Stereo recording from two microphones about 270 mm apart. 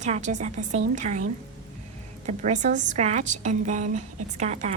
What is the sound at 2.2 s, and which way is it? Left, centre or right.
A woman's voice, right.